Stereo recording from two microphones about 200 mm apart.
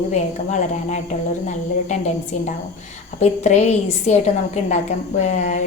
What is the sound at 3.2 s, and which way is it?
A woman's voice, 35° left (ahead or behind).